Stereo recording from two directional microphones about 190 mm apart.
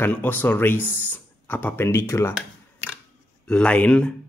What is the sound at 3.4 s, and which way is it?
Speech, 5° left (ahead or behind).